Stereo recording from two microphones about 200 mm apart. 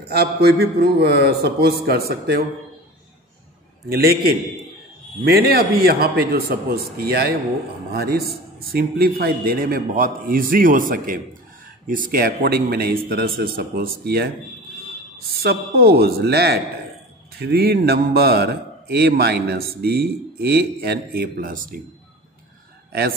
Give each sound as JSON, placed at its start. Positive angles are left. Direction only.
{"t": 0.0, "sound": "a man's voice", "side_deg": -55}
{"t": 3.9, "sound": "a man's voice", "side_deg": -50}